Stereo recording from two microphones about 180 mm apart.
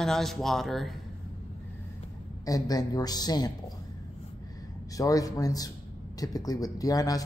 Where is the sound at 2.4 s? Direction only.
20° left (ahead or behind).